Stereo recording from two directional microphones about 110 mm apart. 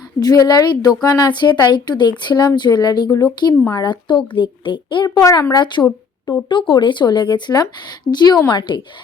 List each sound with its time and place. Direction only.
0.2 s speech: 35° left (ahead or behind)